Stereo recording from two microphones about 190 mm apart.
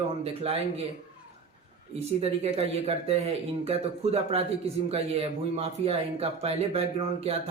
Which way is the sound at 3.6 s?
30° right (ahead or behind).